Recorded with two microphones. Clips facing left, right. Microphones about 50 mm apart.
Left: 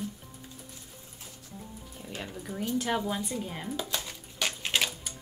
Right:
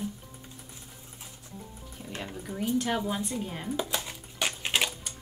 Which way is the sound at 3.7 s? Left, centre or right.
Centre.